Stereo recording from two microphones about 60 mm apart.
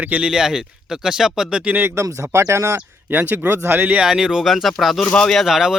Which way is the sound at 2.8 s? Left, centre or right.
Right.